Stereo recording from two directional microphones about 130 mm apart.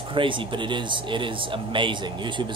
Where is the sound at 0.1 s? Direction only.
40° right (ahead or behind).